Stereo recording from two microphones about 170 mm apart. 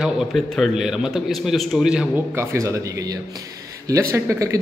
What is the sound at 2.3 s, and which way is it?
Speech, 15° right (ahead or behind).